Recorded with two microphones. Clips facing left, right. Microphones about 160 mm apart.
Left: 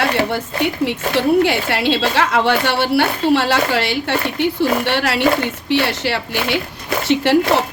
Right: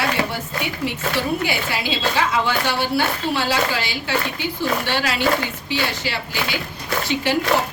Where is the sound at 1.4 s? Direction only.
75° left (ahead or behind).